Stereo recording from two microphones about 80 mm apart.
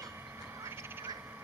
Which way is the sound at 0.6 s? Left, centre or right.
Right.